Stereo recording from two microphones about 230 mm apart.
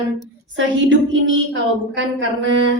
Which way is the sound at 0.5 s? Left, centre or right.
Right.